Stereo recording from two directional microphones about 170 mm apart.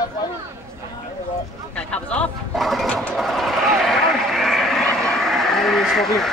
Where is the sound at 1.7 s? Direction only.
5° left (ahead or behind).